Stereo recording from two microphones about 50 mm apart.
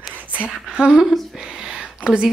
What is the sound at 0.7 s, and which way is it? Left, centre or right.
Speech, centre.